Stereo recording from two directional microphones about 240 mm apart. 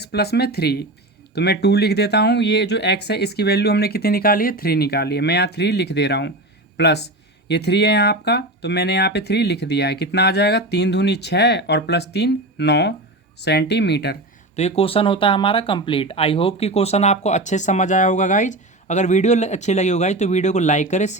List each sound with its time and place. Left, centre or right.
0.0 s speech: left
14.5 s speech: left